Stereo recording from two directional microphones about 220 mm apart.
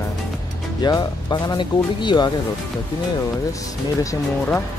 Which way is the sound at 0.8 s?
20° left (ahead or behind).